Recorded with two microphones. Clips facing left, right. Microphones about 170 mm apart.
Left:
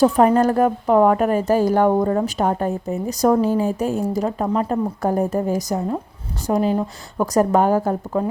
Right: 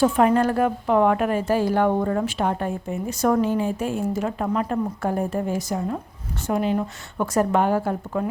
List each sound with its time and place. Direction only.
0.0 s speech: 35° left (ahead or behind)